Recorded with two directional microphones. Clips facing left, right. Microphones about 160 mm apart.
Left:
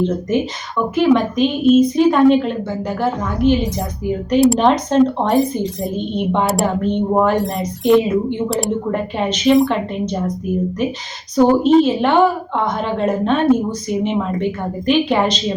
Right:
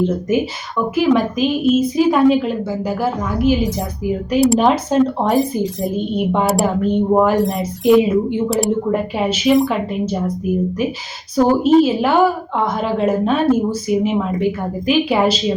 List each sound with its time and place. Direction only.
0.0 s a woman's voice: 5° right (ahead or behind)
11.3 s a woman's voice: 5° right (ahead or behind)